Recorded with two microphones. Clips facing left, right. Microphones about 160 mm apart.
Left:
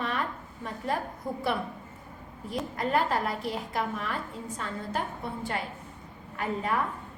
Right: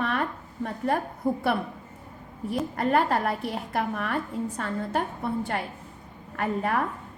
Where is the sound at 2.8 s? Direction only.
60° right (ahead or behind).